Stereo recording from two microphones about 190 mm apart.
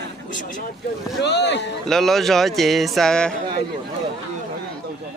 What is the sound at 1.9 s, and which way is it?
Speech, centre (ahead or behind).